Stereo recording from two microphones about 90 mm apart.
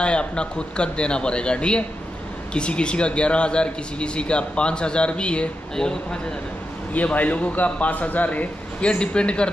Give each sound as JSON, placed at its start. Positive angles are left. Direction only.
{"t": 0.0, "sound": "speech", "side_deg": 10}